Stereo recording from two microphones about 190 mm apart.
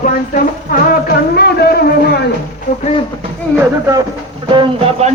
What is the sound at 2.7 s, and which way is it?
Music, 40° left (ahead or behind).